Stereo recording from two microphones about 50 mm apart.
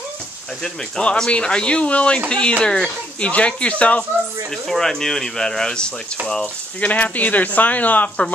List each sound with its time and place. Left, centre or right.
0.9 s speech: centre
4.6 s speech: centre
6.4 s speech: left